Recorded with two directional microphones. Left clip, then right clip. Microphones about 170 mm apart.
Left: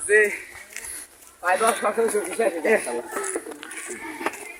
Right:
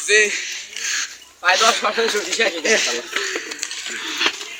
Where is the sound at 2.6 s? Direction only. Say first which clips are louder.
Right 4 dB; 10° left (ahead or behind).